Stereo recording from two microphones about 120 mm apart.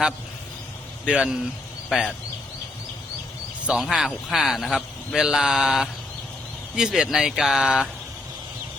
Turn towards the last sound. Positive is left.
turn(degrees=-5)  # may be behind; listen again after turning